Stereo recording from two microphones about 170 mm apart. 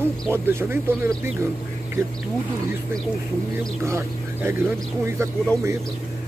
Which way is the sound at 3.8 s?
15° right (ahead or behind).